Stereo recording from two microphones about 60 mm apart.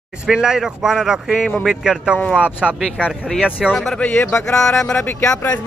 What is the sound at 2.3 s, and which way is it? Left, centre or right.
A man's voice, right.